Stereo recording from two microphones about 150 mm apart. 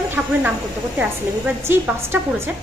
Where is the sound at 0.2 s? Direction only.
5° right (ahead or behind).